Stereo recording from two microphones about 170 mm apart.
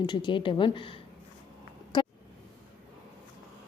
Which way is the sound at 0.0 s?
25° left (ahead or behind).